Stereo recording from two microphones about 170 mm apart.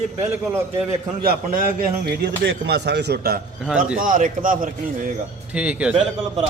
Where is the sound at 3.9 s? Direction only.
50° right (ahead or behind).